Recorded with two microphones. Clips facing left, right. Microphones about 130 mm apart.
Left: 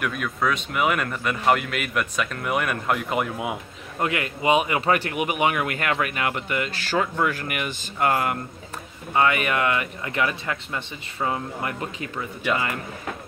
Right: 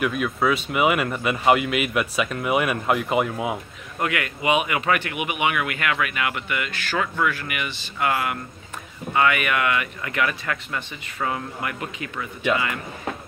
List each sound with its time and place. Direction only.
0.0 s speech: 5° right (ahead or behind)
4.0 s speech: 30° left (ahead or behind)